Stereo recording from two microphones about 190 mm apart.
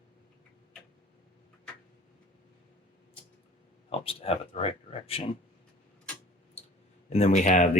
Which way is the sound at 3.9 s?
30° left (ahead or behind).